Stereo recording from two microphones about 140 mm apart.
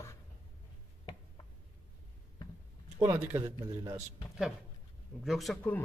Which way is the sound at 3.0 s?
20° right (ahead or behind).